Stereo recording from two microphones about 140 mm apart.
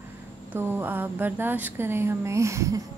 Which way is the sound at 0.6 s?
15° right (ahead or behind).